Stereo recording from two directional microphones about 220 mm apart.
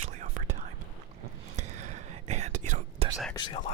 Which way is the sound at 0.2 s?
35° right (ahead or behind).